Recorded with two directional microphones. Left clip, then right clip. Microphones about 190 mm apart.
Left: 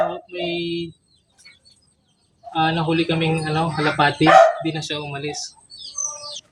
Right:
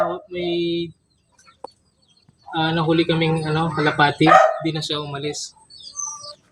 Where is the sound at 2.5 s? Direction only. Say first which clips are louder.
Even; 20° right (ahead or behind).